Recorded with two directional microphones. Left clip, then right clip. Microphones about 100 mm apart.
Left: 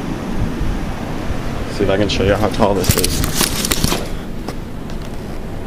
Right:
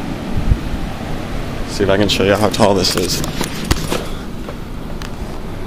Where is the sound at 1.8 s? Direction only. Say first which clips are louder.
Right 2 dB; 50° right (ahead or behind).